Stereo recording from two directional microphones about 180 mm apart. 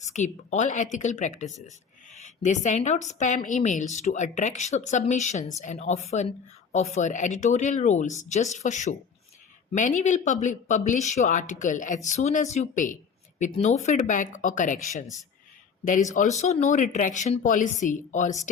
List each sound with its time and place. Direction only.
0.0 s a woman's voice: 40° left (ahead or behind)
16.4 s a woman's voice: 40° left (ahead or behind)